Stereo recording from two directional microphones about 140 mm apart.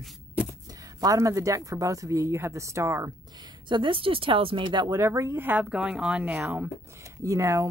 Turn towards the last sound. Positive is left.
turn(degrees=-20)  # may be behind; listen again after turning